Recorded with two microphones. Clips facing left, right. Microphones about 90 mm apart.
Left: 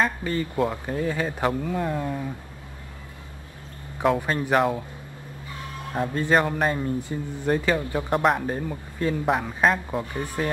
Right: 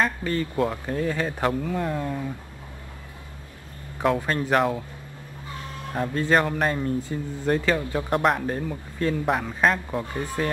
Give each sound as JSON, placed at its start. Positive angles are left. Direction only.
{"t": 0.0, "sound": "speech", "side_deg": 10}
{"t": 4.2, "sound": "speech", "side_deg": 10}
{"t": 5.9, "sound": "speech", "side_deg": 5}
{"t": 7.0, "sound": "speech", "side_deg": 15}